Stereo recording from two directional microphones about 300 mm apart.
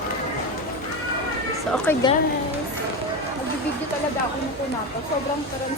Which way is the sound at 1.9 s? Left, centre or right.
Centre.